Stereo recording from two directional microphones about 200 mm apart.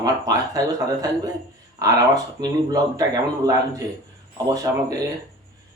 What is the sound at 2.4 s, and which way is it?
Speech, 20° right (ahead or behind).